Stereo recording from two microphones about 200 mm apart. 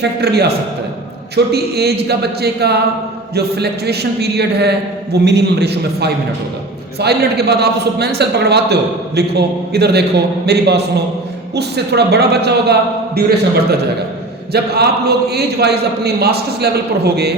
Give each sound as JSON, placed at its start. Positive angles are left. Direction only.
{"t": 0.0, "sound": "a man's voice", "side_deg": -55}